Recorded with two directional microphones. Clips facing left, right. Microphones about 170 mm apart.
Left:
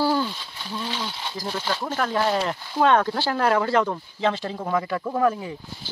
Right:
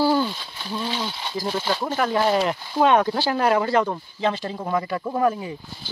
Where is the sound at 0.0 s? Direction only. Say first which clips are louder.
Right 3 dB; 15° right (ahead or behind).